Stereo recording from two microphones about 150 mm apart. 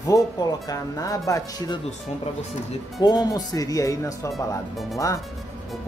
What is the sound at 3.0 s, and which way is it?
Speech, 30° left (ahead or behind).